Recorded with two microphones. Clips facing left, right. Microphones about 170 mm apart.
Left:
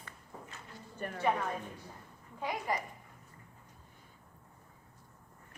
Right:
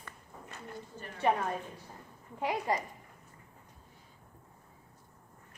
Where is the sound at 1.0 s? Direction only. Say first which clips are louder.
Left 7 dB; 55° left (ahead or behind).